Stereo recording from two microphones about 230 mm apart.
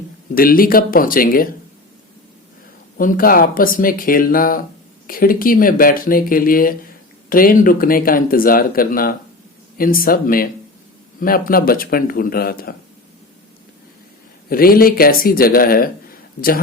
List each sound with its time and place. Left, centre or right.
0.3 s speech: left
3.0 s speech: left
14.5 s speech: left